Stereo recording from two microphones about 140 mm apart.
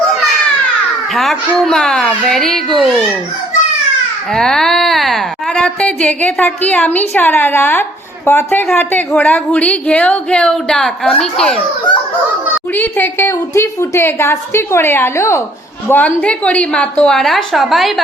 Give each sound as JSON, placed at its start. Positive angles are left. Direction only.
{"t": 1.1, "sound": "a child's voice", "side_deg": 0}
{"t": 4.4, "sound": "a child's voice", "side_deg": 5}
{"t": 11.9, "sound": "a sound", "side_deg": 35}
{"t": 12.7, "sound": "speech", "side_deg": 15}